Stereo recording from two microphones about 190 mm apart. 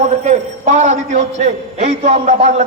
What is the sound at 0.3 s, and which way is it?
A man's voice, 40° right (ahead or behind).